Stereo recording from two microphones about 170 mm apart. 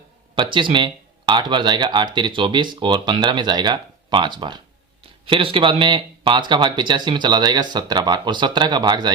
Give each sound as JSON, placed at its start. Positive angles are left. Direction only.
{"t": 0.3, "sound": "speech", "side_deg": -30}